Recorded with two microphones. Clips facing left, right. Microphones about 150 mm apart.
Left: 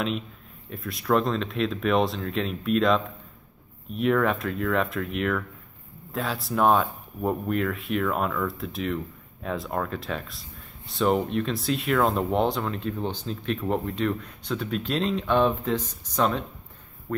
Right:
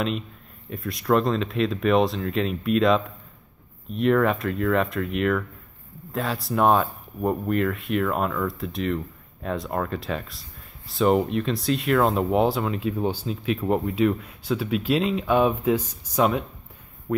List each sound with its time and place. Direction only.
0.7 s speech: centre (ahead or behind)